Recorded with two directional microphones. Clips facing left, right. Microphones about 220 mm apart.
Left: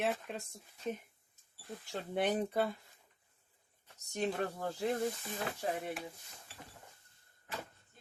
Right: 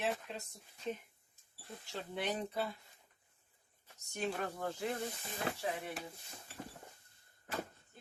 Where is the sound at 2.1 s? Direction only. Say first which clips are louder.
Left 6 dB; 50° left (ahead or behind).